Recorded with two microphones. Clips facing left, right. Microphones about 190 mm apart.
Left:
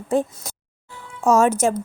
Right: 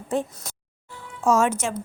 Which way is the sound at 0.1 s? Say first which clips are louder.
Left 5 dB; 35° left (ahead or behind).